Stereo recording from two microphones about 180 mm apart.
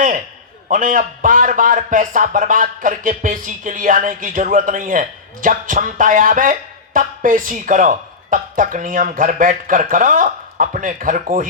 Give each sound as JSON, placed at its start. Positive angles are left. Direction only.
{"t": 0.7, "sound": "a man's voice", "side_deg": -50}